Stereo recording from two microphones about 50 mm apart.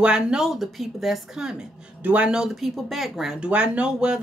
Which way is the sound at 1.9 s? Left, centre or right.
Right.